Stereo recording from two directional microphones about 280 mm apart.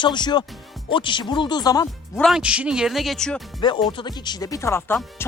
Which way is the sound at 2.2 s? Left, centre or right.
Centre.